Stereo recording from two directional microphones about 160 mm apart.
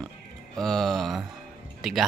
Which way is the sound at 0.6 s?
5° left (ahead or behind).